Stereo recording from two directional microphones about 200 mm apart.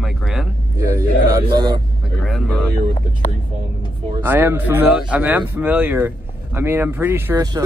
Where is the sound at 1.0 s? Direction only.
15° right (ahead or behind).